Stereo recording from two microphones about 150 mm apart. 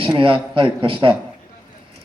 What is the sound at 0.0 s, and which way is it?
A man's voice, 35° right (ahead or behind).